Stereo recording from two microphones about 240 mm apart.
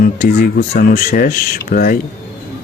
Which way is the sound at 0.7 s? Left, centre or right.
Left.